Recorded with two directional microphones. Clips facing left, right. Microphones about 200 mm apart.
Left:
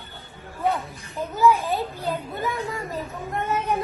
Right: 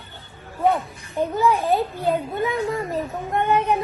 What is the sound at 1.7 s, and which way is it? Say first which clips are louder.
Speech: right 6 dB; centre (ahead or behind).